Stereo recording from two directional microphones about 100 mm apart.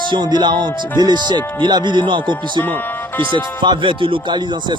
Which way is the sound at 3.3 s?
50° right (ahead or behind).